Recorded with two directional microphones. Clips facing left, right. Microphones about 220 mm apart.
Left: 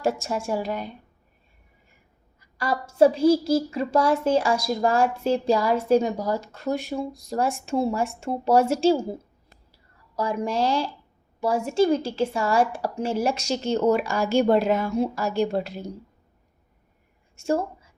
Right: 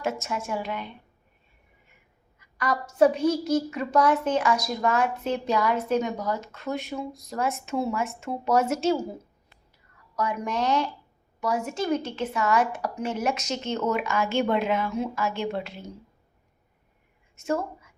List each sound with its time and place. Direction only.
0.0 s a woman's voice: 35° left (ahead or behind)
2.4 s a woman's voice: 30° left (ahead or behind)
9.5 s a sound: 30° left (ahead or behind)
11.3 s a woman's voice: 25° left (ahead or behind)
17.4 s a woman's voice: 30° left (ahead or behind)